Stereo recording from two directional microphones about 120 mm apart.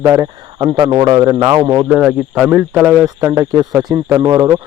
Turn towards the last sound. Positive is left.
turn(degrees=-30)  # may be behind; listen again after turning